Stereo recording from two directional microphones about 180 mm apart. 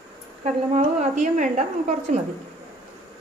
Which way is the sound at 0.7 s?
45° right (ahead or behind).